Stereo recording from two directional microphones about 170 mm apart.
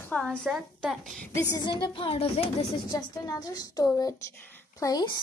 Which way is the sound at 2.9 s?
20° left (ahead or behind).